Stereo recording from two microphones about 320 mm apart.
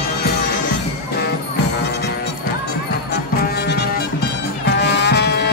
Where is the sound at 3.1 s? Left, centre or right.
Left.